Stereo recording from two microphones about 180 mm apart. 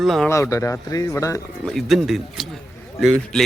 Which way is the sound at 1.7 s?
Centre (ahead or behind).